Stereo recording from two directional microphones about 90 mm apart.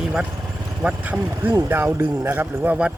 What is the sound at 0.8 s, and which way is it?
Speech, 20° right (ahead or behind).